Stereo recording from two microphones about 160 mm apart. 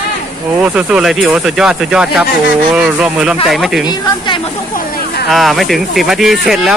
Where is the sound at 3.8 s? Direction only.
30° left (ahead or behind).